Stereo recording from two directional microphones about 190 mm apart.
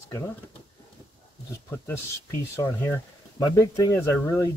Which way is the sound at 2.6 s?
10° left (ahead or behind).